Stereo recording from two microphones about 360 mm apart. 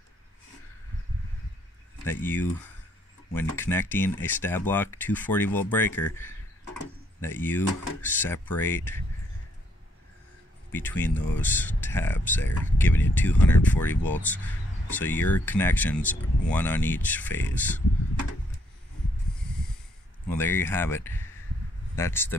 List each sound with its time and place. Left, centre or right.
2.0 s speech: centre
10.7 s speech: centre
20.2 s speech: centre